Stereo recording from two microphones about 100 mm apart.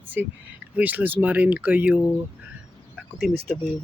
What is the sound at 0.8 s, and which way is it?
Speech, 15° right (ahead or behind).